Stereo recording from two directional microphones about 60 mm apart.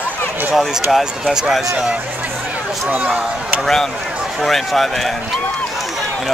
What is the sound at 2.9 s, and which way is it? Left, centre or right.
Speech, right.